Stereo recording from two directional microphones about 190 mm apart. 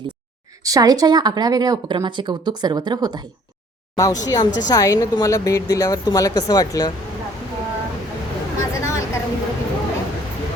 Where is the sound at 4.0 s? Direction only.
20° left (ahead or behind).